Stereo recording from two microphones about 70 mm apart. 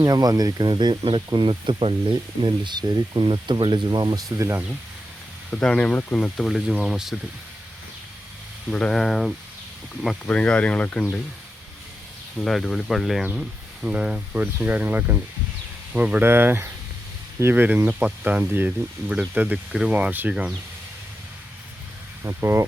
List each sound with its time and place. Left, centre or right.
0.0 s speech: right
4.4 s speech: right
5.5 s speech: centre
6.1 s speech: centre
8.7 s speech: centre
9.0 s speech: centre
10.2 s speech: centre
12.4 s speech: centre
13.8 s speech: centre
22.2 s speech: right